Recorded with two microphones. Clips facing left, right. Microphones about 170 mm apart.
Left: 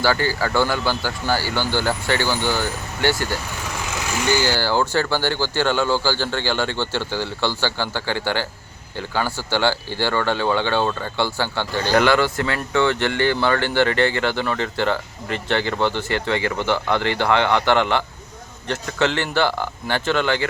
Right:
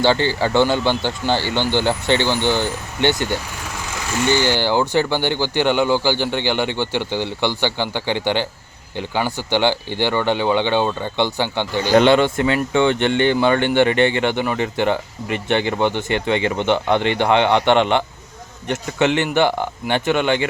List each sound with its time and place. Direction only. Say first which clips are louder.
0.0 s speech: right 3 dB; 25° right (ahead or behind)